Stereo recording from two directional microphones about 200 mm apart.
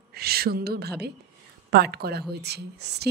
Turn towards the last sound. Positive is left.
turn(degrees=-55)  # may be behind; listen again after turning